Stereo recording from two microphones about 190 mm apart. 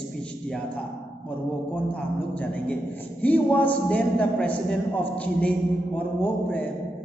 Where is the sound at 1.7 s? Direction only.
5° left (ahead or behind).